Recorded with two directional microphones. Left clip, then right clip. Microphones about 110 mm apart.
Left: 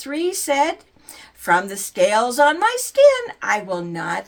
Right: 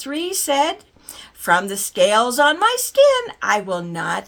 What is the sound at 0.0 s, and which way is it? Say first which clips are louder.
Speech: left 1 dB; 40° right (ahead or behind).